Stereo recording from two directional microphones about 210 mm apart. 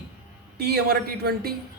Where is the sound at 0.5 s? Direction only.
50° right (ahead or behind).